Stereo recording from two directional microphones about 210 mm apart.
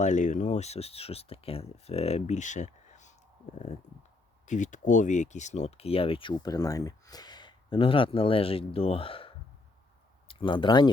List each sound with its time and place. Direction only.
0.0 s speech: 35° left (ahead or behind)